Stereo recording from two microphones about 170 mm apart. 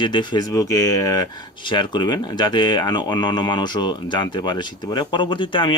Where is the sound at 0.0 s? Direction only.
25° left (ahead or behind).